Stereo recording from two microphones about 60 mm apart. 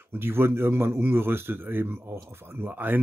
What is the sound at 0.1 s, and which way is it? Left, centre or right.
Speech, right.